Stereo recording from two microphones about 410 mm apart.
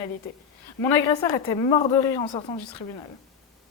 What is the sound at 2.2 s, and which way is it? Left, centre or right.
Speech, left.